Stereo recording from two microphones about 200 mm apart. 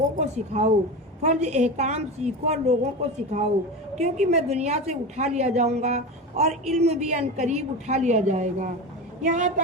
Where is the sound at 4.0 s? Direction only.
35° right (ahead or behind).